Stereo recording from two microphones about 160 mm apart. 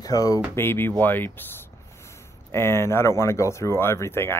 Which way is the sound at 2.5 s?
15° left (ahead or behind).